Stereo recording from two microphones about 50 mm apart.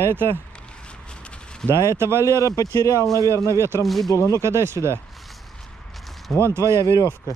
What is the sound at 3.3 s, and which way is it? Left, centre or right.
Speech, right.